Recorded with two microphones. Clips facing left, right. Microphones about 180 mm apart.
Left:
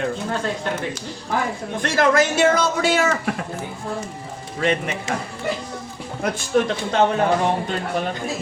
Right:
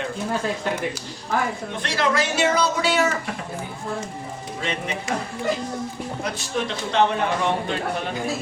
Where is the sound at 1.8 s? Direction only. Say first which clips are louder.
Left 5 dB; 50° left (ahead or behind).